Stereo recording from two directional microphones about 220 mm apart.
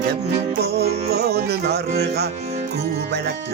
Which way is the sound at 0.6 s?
45° right (ahead or behind).